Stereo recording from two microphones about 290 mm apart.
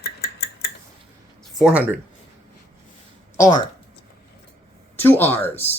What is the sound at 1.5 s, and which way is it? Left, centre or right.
Speech, centre.